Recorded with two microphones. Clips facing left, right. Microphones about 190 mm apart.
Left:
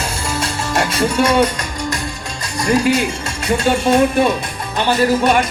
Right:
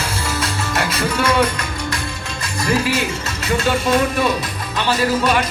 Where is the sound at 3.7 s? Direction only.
25° left (ahead or behind).